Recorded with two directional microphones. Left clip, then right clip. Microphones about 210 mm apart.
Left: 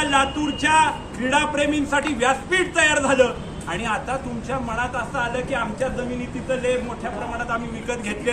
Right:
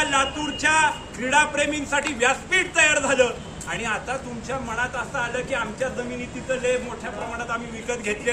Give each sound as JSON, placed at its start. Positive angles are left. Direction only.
{"t": 0.0, "sound": "a man's voice", "side_deg": -5}